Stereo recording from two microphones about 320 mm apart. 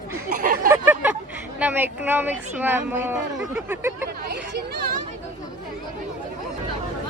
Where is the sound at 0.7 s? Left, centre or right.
Centre.